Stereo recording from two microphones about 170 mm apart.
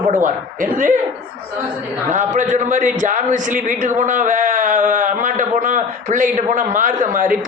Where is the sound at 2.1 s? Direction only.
45° right (ahead or behind).